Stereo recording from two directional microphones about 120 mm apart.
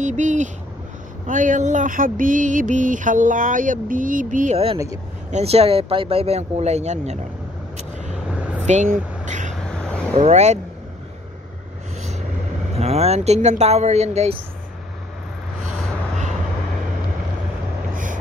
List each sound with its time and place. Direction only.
0.0 s a sound: 90° right
5.3 s speech: 55° right (ahead or behind)
8.6 s vehicle: 85° right
9.7 s a sound: 10° left (ahead or behind)
10.2 s speech: 70° right (ahead or behind)
12.7 s speech: 60° right (ahead or behind)